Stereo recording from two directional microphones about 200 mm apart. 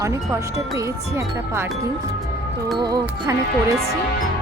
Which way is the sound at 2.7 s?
20° right (ahead or behind).